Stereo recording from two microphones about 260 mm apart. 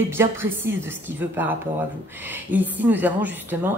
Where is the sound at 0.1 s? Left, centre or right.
Centre.